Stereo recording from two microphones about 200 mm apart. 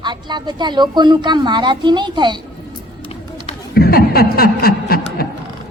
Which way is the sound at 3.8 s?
50° left (ahead or behind).